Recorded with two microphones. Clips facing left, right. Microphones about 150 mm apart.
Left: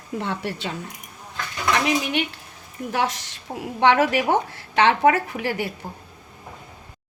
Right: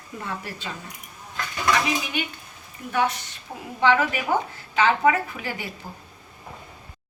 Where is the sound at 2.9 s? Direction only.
90° left; by 5.7 s 65° left (ahead or behind).